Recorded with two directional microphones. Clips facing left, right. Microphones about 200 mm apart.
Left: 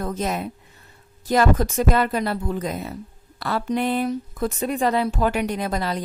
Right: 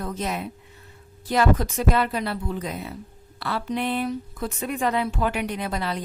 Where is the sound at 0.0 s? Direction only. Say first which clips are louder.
Left 3 dB; 45° left (ahead or behind).